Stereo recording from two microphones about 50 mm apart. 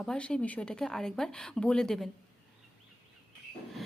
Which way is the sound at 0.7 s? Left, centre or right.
Centre.